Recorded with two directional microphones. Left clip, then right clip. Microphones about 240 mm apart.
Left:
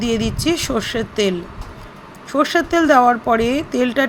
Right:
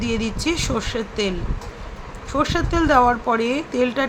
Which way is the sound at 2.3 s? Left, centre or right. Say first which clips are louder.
Left 5 dB; centre.